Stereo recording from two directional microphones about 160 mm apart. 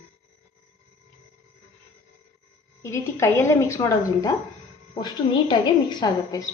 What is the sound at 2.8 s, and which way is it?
Speech, 15° left (ahead or behind).